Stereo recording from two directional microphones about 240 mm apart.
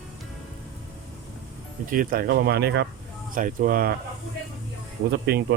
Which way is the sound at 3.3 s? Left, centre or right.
Right.